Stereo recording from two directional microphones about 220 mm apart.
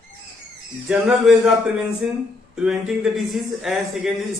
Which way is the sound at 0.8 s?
5° right (ahead or behind).